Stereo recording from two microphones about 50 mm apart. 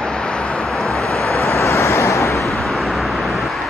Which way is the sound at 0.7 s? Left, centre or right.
Centre.